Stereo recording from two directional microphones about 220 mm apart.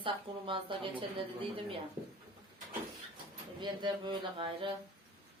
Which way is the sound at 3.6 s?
20° right (ahead or behind).